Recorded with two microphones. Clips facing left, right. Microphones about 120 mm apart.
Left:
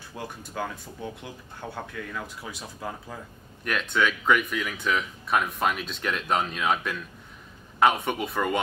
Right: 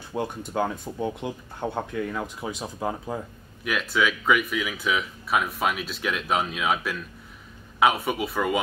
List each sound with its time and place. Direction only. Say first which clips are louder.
0.1 s speech: right 8 dB; 20° right (ahead or behind)
3.6 s speech: right 1 dB; 5° right (ahead or behind)